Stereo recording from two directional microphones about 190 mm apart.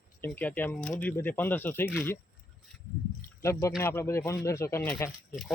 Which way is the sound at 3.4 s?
15° left (ahead or behind).